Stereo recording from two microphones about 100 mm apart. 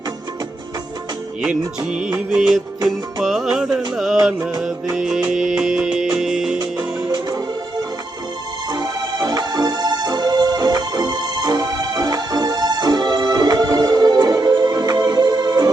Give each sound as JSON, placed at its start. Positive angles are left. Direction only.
{"t": 1.4, "sound": "music", "side_deg": -10}
{"t": 3.2, "sound": "music", "side_deg": -5}
{"t": 5.3, "sound": "music", "side_deg": -5}
{"t": 6.6, "sound": "music", "side_deg": -40}
{"t": 8.7, "sound": "music", "side_deg": -40}